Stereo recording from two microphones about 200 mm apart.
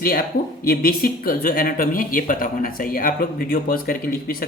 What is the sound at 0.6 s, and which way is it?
Speech, 50° left (ahead or behind).